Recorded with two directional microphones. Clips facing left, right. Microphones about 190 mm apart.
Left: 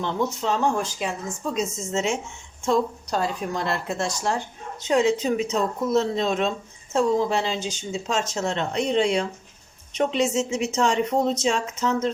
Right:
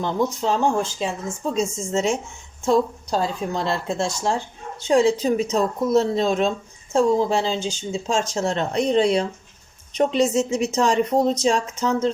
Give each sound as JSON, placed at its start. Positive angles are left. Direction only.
{"t": 0.0, "sound": "speech", "side_deg": -35}